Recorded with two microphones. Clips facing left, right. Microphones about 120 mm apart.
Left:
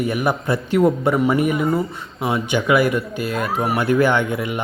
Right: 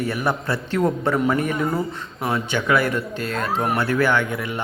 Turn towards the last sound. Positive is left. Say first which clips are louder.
# left 2 dB
turn(degrees=20)  # may be behind; listen again after turning